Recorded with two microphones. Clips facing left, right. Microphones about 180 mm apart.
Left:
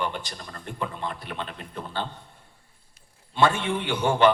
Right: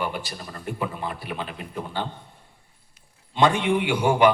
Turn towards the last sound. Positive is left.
turn(degrees=-10)  # may be behind; listen again after turning